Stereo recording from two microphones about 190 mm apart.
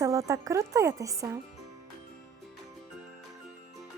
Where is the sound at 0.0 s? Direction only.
15° right (ahead or behind).